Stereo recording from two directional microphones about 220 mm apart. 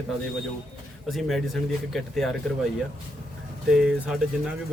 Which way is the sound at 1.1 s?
Centre (ahead or behind).